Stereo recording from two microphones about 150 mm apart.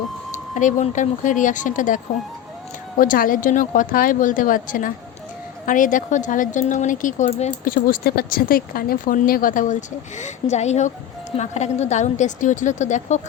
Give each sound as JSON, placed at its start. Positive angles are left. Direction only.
{"t": 0.5, "sound": "a woman's voice", "side_deg": 55}
{"t": 3.0, "sound": "a woman's voice", "side_deg": 70}
{"t": 7.6, "sound": "speech", "side_deg": 70}
{"t": 10.2, "sound": "a woman's voice", "side_deg": 50}